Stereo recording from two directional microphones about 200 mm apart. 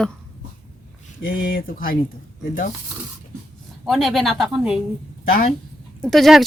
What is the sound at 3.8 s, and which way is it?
Speech, centre (ahead or behind).